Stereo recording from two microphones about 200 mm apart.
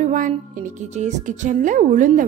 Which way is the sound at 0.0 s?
40° right (ahead or behind).